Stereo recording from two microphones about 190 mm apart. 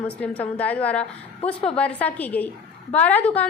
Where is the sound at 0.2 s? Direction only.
10° left (ahead or behind).